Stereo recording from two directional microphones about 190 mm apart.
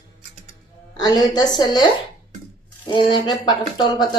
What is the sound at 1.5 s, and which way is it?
Speech, 20° left (ahead or behind).